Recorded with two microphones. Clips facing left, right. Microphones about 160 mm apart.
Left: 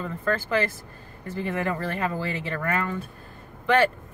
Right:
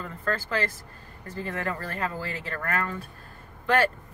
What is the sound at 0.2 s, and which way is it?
Speech, 20° left (ahead or behind).